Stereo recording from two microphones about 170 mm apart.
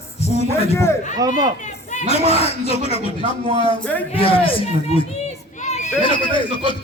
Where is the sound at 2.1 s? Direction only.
35° left (ahead or behind).